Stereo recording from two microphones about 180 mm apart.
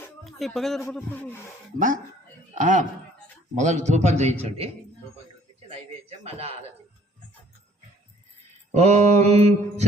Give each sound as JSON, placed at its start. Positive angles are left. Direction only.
{"t": 0.3, "sound": "speech", "side_deg": 0}
{"t": 1.1, "sound": "a sound", "side_deg": 10}
{"t": 2.6, "sound": "speech", "side_deg": -45}
{"t": 3.6, "sound": "mantra", "side_deg": -40}
{"t": 5.6, "sound": "a sound", "side_deg": -35}
{"t": 8.7, "sound": "mantra", "side_deg": -40}